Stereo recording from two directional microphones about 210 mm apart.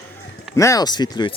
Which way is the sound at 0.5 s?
15° left (ahead or behind).